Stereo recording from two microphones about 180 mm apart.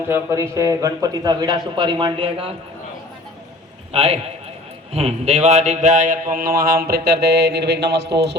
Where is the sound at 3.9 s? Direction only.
35° right (ahead or behind).